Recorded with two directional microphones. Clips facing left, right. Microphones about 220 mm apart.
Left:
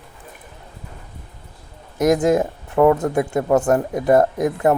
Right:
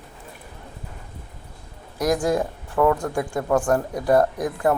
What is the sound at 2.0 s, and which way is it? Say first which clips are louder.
Speech: left 5 dB; 20° left (ahead or behind).